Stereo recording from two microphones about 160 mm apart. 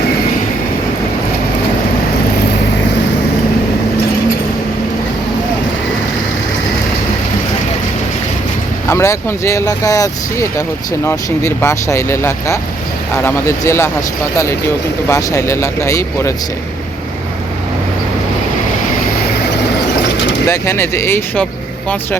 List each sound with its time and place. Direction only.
8.9 s speech: 15° left (ahead or behind)
15.0 s speech: 20° left (ahead or behind)
20.5 s speech: 15° left (ahead or behind)